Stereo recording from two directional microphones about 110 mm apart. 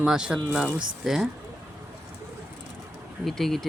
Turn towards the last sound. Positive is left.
turn(degrees=5)  # may be behind; listen again after turning